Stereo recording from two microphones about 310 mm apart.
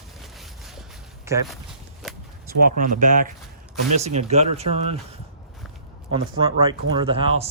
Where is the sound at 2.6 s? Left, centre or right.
Right.